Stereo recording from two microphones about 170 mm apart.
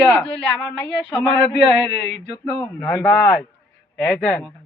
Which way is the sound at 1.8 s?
90° left.